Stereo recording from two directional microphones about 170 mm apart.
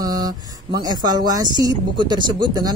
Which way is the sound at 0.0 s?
25° right (ahead or behind).